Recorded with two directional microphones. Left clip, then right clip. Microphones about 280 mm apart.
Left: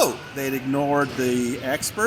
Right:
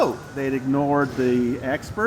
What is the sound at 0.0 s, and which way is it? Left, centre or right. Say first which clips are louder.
Speech: even; left.